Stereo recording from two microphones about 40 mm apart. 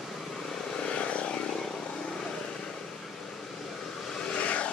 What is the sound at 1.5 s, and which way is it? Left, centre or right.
Vehicle, centre.